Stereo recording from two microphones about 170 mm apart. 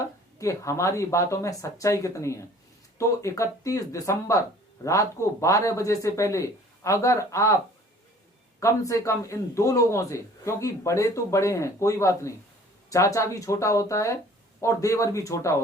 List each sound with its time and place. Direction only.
0.0 s a man's voice: 15° left (ahead or behind)
8.6 s a man's voice: 15° left (ahead or behind)